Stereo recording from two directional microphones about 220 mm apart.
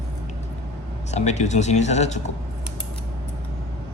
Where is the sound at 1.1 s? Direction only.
30° left (ahead or behind).